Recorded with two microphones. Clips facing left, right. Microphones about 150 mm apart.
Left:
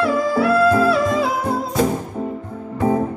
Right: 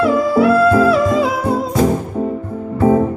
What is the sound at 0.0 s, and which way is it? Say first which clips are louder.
Music: right 5 dB; 20° right (ahead or behind).